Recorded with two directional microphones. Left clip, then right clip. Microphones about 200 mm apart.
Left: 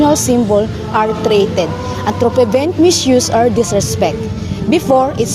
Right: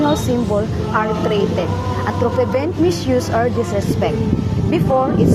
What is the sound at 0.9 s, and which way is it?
Speech, 60° left (ahead or behind).